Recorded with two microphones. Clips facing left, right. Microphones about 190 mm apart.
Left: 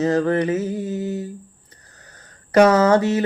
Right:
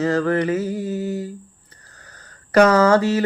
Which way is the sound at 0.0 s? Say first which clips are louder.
Left 1 dB; 20° left (ahead or behind).